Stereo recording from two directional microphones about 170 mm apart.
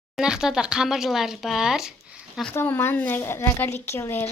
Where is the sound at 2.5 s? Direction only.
15° left (ahead or behind).